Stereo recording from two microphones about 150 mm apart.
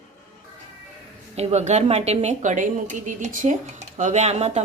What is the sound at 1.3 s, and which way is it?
Speech, 50° right (ahead or behind).